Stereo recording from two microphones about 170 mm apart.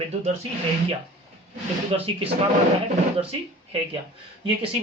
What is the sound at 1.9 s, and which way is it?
Speech, 35° right (ahead or behind).